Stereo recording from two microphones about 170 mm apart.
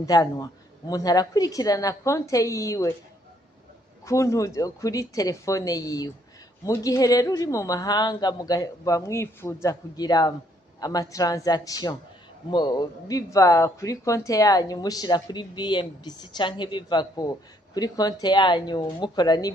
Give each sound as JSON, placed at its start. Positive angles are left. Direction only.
{"t": 0.0, "sound": "speech", "side_deg": 20}
{"t": 4.0, "sound": "speech", "side_deg": 20}